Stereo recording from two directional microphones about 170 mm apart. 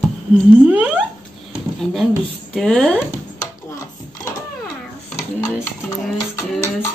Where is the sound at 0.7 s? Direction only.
5° right (ahead or behind).